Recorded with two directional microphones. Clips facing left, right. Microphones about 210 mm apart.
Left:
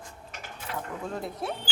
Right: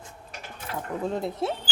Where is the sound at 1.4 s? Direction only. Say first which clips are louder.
Right 5 dB; 25° right (ahead or behind).